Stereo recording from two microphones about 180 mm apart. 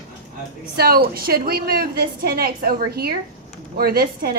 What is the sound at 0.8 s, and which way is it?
A woman's voice, 55° right (ahead or behind).